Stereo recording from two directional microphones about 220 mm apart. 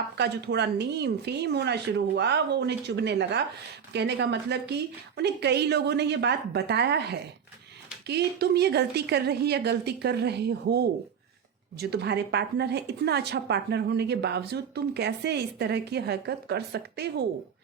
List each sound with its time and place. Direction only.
0.2 s a woman's voice: 50° right (ahead or behind)